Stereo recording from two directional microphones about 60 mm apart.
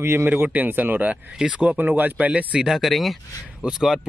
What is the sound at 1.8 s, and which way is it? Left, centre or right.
Speech, right.